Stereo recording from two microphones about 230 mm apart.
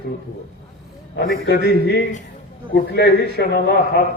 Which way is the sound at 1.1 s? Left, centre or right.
Left.